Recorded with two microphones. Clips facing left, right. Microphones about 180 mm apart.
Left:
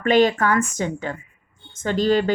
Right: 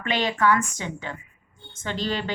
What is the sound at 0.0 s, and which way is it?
Speech, 45° left (ahead or behind).